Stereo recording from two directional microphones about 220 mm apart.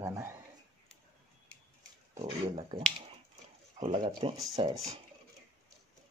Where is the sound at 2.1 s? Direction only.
30° right (ahead or behind).